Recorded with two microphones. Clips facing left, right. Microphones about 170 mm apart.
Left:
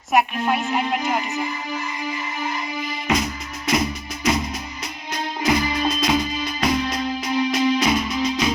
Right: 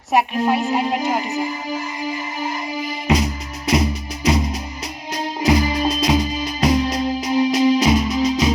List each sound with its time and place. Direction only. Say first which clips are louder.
0.1 s music: right 2 dB; 30° right (ahead or behind)